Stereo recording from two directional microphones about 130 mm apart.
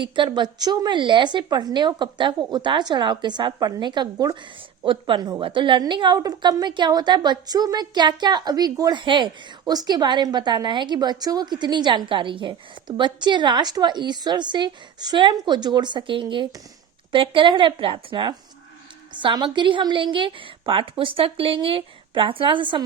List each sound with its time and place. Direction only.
0.0 s a woman's voice: 35° right (ahead or behind)